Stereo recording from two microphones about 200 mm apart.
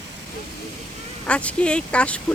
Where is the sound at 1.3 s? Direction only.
5° left (ahead or behind).